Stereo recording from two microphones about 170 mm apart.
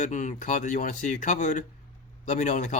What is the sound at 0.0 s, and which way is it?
Speech, 45° left (ahead or behind).